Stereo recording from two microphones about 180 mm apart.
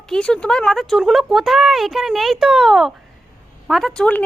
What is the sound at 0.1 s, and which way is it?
A woman's voice, 5° left (ahead or behind).